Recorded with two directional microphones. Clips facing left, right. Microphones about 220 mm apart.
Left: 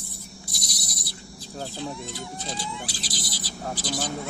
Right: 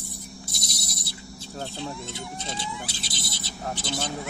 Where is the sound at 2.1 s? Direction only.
25° right (ahead or behind).